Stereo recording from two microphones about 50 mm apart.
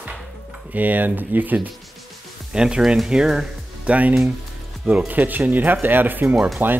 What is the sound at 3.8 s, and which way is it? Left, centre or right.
Speech, right.